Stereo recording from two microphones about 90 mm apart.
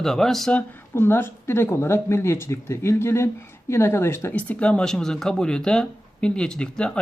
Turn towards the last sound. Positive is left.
turn(degrees=10)  # may be behind; listen again after turning